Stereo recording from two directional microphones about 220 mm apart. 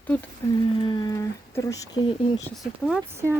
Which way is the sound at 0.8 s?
20° left (ahead or behind).